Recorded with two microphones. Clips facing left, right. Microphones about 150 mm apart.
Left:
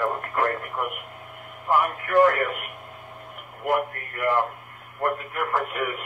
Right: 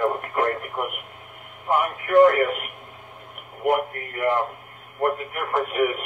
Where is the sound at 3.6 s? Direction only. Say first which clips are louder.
Right 3 dB; 20° right (ahead or behind).